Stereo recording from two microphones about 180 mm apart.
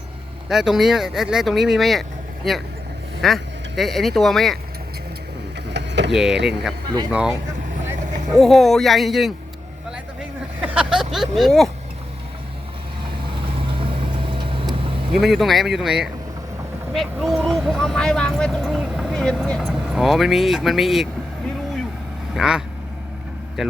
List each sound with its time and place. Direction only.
0.4 s speech: centre (ahead or behind)
5.7 s vehicle: 75° right (ahead or behind)
6.1 s speech: 5° right (ahead or behind)
10.2 s vehicle: 5° right (ahead or behind)
13.6 s vehicle: 30° right (ahead or behind)
15.1 s speech: centre (ahead or behind)
22.4 s speech: 5° right (ahead or behind)